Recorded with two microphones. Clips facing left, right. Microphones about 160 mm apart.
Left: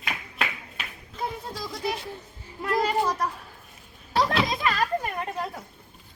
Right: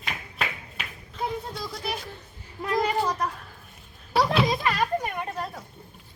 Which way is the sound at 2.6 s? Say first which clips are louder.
Even; 15° right (ahead or behind).